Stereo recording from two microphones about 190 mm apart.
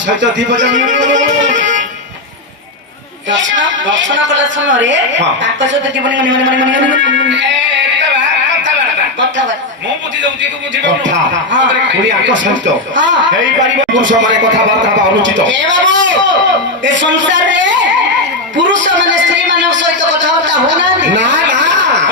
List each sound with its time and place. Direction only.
0.2 s a woman's voice: 70° right (ahead or behind)
3.2 s a woman's voice: 75° right (ahead or behind)
10.8 s a woman's voice: 75° right (ahead or behind)
16.8 s a sound: 75° right (ahead or behind)